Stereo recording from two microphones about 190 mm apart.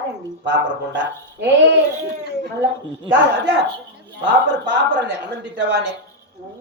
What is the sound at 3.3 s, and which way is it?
Speech, 65° right (ahead or behind).